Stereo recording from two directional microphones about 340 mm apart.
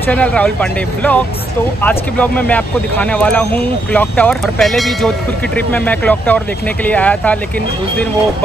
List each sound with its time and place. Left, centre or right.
0.1 s speech: centre